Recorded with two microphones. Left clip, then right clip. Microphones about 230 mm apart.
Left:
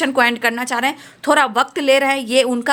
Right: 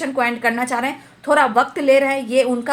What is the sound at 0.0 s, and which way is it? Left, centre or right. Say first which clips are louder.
A woman's voice: left 3 dB; left.